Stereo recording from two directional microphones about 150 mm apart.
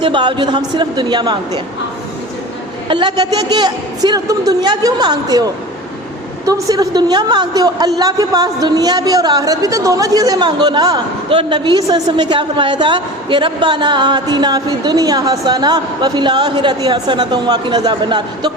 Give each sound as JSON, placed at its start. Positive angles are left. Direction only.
{"t": 0.0, "sound": "a woman's voice", "side_deg": -30}
{"t": 2.9, "sound": "a woman's voice", "side_deg": -30}